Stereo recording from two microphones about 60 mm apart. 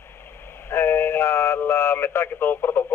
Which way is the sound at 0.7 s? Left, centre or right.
Left.